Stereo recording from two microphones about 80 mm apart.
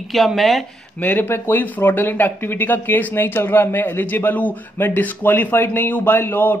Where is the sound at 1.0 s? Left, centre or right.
Left.